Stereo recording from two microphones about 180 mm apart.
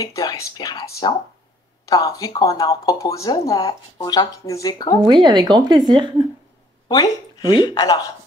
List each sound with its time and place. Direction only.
0.0 s speech: 20° left (ahead or behind)
5.0 s speech: 25° right (ahead or behind)
6.9 s speech: 20° left (ahead or behind)